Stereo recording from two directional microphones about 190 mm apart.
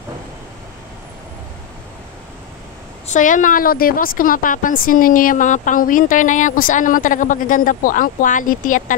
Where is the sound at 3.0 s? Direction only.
40° left (ahead or behind).